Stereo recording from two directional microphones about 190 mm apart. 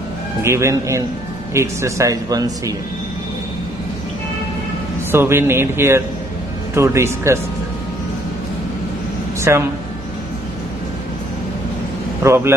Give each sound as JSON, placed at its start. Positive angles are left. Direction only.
{"t": 0.4, "sound": "speech", "side_deg": -15}
{"t": 5.1, "sound": "speech", "side_deg": -15}
{"t": 9.4, "sound": "a man's voice", "side_deg": -15}
{"t": 12.2, "sound": "speech", "side_deg": -15}